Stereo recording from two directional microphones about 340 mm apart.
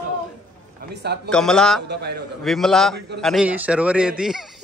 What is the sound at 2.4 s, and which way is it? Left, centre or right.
A man's voice, centre.